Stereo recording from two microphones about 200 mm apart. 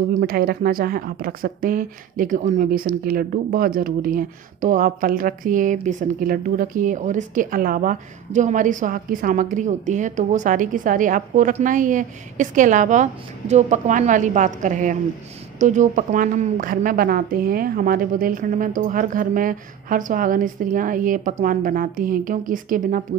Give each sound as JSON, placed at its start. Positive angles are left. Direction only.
{"t": 0.1, "sound": "a woman's voice", "side_deg": -50}